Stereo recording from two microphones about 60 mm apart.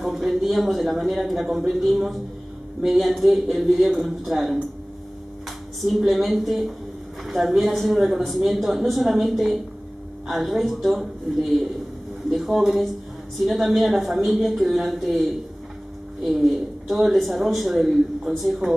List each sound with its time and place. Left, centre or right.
0.0 s speech: centre
5.9 s speech: centre
12.3 s speech: centre
16.3 s speech: centre